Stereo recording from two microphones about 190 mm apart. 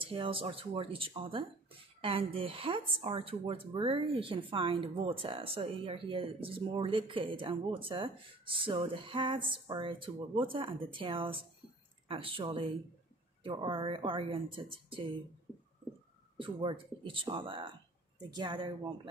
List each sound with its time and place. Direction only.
0.0 s speech: 30° right (ahead or behind)
16.3 s speech: 25° right (ahead or behind)